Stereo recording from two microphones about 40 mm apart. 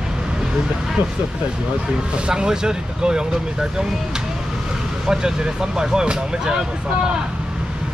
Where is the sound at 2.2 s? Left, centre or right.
Centre.